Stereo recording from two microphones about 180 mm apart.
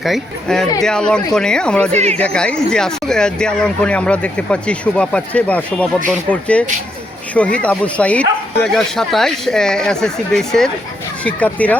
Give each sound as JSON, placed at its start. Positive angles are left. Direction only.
{"t": 0.0, "sound": "speech", "side_deg": 0}
{"t": 1.9, "sound": "speech", "side_deg": -35}
{"t": 2.1, "sound": "speech", "side_deg": 5}